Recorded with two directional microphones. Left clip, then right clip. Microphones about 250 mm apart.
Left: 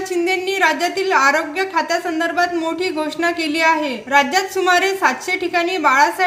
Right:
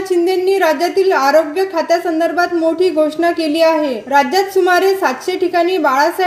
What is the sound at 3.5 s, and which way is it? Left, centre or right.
A woman's voice, left.